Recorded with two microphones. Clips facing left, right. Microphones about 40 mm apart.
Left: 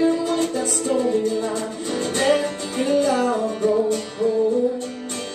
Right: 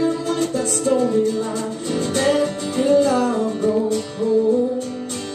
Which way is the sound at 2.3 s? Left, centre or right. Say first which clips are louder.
Right 1 dB; left.